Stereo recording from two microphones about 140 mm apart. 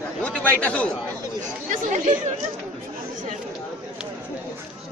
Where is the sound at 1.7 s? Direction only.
65° right (ahead or behind).